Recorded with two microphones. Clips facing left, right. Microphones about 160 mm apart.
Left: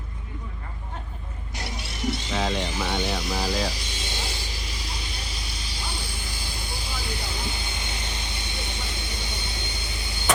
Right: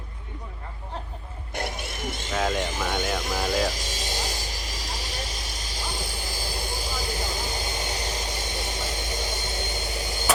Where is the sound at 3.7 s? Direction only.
40° right (ahead or behind).